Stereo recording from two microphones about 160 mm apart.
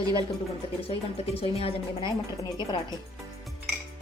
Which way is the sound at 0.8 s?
35° left (ahead or behind).